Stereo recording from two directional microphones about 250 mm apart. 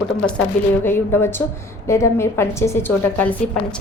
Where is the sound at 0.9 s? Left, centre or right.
Centre.